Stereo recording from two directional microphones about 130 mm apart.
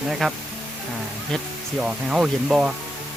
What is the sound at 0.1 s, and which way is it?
Speech, 5° right (ahead or behind).